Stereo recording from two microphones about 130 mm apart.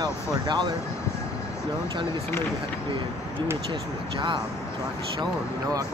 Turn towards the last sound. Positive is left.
turn(degrees=-35)  # may be behind; listen again after turning